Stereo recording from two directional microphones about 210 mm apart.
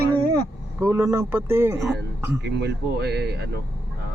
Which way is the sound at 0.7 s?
10° right (ahead or behind).